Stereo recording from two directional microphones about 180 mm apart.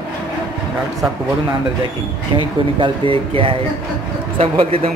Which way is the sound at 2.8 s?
30° right (ahead or behind).